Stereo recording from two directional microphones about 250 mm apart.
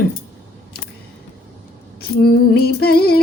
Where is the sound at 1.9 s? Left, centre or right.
Left.